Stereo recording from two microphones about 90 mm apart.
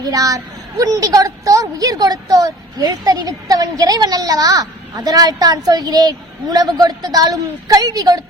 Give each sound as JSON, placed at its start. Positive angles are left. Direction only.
{"t": 0.0, "sound": "a woman's voice", "side_deg": -40}